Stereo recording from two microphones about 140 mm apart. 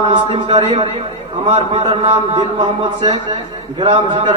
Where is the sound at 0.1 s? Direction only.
35° right (ahead or behind).